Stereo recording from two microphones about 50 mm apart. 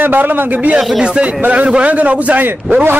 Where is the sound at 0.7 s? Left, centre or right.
Centre.